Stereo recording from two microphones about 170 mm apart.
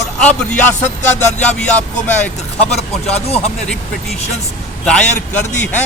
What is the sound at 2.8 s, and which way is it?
Speech, 40° left (ahead or behind).